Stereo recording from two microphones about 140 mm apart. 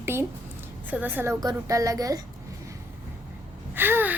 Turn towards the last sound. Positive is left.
turn(degrees=-15)  # may be behind; listen again after turning